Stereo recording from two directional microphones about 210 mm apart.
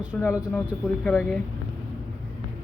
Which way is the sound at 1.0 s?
5° left (ahead or behind).